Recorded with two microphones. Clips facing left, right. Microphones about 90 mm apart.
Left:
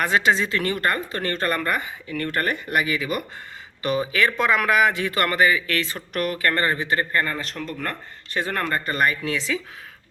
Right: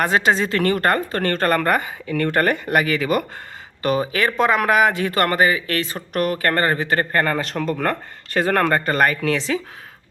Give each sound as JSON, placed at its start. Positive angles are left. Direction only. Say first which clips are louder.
{"t": 0.0, "sound": "speech", "louder": "right 2 dB", "side_deg": -40}
{"t": 2.1, "sound": "speech", "louder": "right 6 dB", "side_deg": -90}
{"t": 3.8, "sound": "speech", "louder": "right 2 dB", "side_deg": -40}